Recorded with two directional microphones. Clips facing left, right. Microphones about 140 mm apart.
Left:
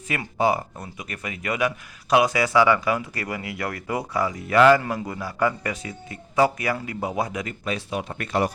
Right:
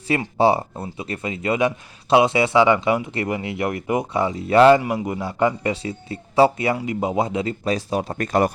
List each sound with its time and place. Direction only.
0.1 s speech: 30° right (ahead or behind); by 8.5 s 45° right (ahead or behind)